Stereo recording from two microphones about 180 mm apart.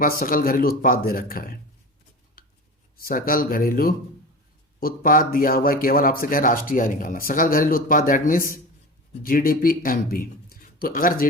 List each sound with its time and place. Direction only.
0.0 s speech: 50° left (ahead or behind)
2.4 s a sound: 50° left (ahead or behind)
3.0 s speech: 55° left (ahead or behind)
9.2 s speech: 55° left (ahead or behind)